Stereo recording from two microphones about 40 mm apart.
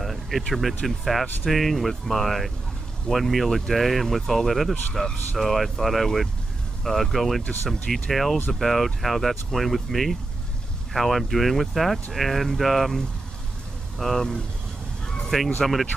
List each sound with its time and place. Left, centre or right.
0.0 s a sound: centre
0.5 s speech: centre
5.0 s speech: centre
5.4 s speech: centre